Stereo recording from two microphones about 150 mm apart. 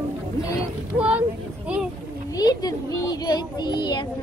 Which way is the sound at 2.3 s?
25° left (ahead or behind).